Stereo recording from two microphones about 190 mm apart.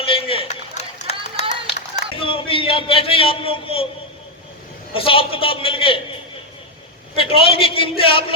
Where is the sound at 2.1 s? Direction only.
30° left (ahead or behind).